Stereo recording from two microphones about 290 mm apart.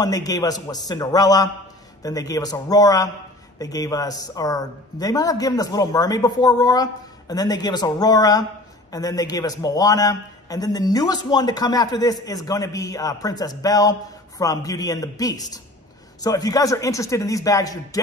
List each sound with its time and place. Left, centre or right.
0.0 s a man's voice: centre